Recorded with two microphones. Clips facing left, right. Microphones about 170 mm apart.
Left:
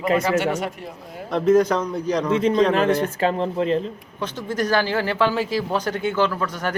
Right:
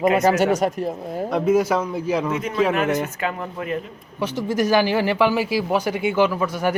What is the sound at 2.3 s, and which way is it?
Speech, 30° left (ahead or behind).